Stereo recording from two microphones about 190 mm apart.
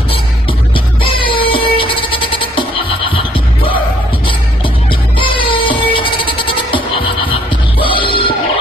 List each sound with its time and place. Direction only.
0.7 s music: 30° left (ahead or behind)
5.2 s music: 25° left (ahead or behind)